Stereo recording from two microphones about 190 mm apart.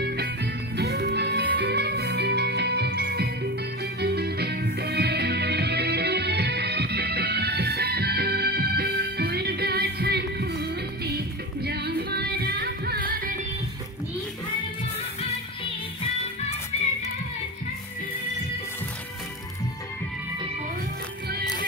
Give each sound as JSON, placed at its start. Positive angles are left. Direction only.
{"t": 0.7, "sound": "music", "side_deg": -60}
{"t": 16.7, "sound": "music", "side_deg": 35}